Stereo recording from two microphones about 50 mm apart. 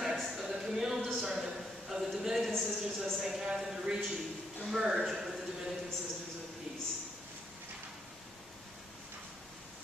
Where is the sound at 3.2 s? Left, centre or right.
Centre.